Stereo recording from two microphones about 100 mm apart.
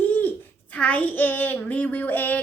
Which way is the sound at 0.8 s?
15° left (ahead or behind).